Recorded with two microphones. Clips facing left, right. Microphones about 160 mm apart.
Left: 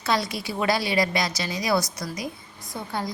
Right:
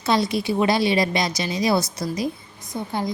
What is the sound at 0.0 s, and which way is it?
A woman's voice, 25° right (ahead or behind).